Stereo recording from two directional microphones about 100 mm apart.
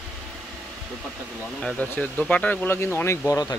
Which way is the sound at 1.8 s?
15° left (ahead or behind).